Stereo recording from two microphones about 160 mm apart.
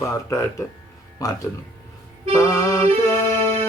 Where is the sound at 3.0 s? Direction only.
20° left (ahead or behind).